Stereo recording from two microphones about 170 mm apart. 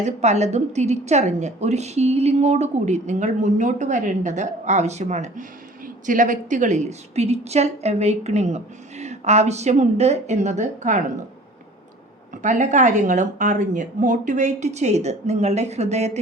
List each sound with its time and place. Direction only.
0.0 s a woman's voice: 40° right (ahead or behind)
12.4 s speech: 45° right (ahead or behind)